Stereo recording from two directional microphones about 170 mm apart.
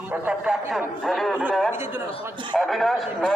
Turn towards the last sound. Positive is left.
turn(degrees=0)  # may be behind; listen again after turning